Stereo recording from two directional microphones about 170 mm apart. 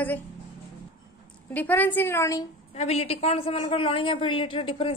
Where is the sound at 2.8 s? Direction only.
40° left (ahead or behind).